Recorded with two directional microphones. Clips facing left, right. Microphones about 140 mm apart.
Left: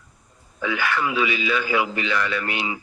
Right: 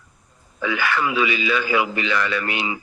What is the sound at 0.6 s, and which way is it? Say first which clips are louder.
Speech: right 2 dB; 90° right.